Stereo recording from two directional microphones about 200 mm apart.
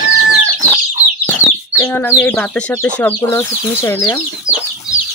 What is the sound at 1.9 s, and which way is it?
Speech, 10° left (ahead or behind).